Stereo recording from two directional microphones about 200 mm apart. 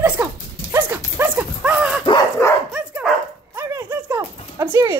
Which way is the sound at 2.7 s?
5° right (ahead or behind).